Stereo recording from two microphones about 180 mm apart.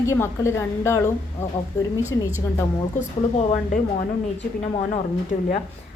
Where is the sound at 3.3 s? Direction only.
45° left (ahead or behind).